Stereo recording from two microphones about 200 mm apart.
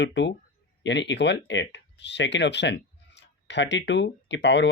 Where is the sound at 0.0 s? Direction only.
65° left (ahead or behind).